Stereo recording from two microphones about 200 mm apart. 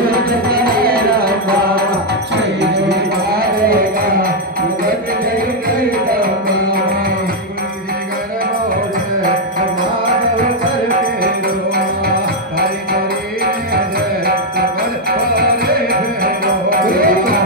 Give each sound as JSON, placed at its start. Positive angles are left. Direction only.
{"t": 0.0, "sound": "music", "side_deg": -50}
{"t": 14.2, "sound": "music", "side_deg": -50}